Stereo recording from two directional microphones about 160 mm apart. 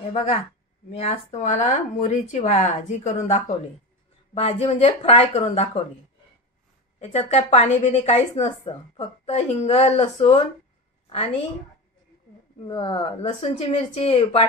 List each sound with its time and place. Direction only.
0.1 s speech: 40° left (ahead or behind)
7.0 s speech: 40° left (ahead or behind)
12.6 s speech: 30° left (ahead or behind)